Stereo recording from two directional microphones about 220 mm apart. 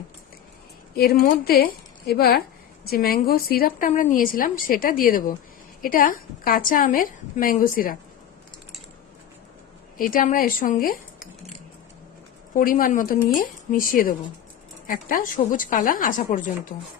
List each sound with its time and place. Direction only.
0.9 s a woman's voice: 45° left (ahead or behind)
10.0 s a woman's voice: 40° left (ahead or behind)
12.5 s a woman's voice: 40° left (ahead or behind)